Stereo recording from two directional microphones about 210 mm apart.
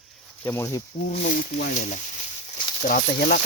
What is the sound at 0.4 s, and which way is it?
Speech, 10° left (ahead or behind).